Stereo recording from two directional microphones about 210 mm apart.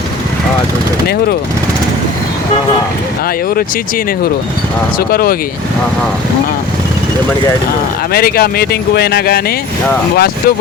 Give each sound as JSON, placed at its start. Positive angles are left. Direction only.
{"t": 4.9, "sound": "speech", "side_deg": 45}
{"t": 8.1, "sound": "speech", "side_deg": 45}